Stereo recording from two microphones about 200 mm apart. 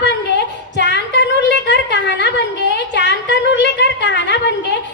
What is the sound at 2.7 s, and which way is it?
A woman's voice, 60° left (ahead or behind).